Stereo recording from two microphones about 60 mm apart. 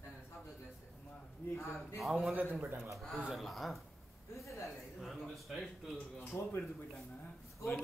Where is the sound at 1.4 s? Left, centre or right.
Left.